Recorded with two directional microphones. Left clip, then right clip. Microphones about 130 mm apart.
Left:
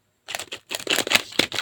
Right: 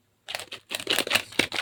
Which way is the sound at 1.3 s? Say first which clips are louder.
Left 3 dB; 20° left (ahead or behind).